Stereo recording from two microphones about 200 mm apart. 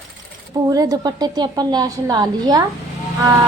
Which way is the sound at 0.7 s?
20° right (ahead or behind).